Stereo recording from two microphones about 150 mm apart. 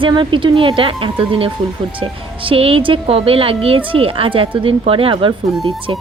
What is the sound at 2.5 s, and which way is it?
A woman's voice, 40° right (ahead or behind).